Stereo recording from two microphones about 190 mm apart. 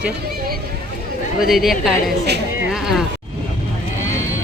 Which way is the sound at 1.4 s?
Centre (ahead or behind).